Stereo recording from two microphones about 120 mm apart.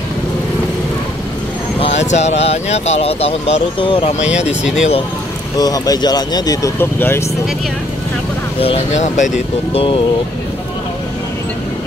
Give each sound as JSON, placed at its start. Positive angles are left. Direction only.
{"t": 1.8, "sound": "speech", "side_deg": 65}
{"t": 4.2, "sound": "speech", "side_deg": -10}
{"t": 5.6, "sound": "speech", "side_deg": 30}
{"t": 6.8, "sound": "speech", "side_deg": 20}
{"t": 8.5, "sound": "speech", "side_deg": 55}
{"t": 9.0, "sound": "speech", "side_deg": 90}